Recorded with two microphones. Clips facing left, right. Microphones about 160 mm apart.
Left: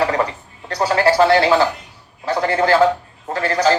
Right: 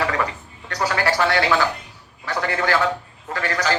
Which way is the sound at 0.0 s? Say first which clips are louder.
Left 5 dB; 30° left (ahead or behind).